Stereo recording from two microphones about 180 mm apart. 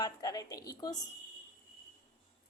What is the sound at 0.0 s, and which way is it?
Speech, 20° left (ahead or behind).